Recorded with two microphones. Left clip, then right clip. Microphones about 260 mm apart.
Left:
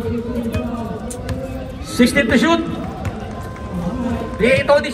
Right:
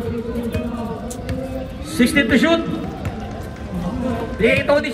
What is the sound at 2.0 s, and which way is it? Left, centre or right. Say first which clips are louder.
Speech: left 1 dB; centre.